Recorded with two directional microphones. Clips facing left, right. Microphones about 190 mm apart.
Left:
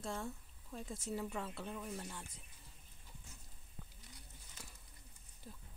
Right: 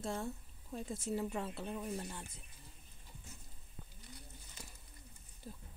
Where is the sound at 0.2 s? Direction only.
15° right (ahead or behind).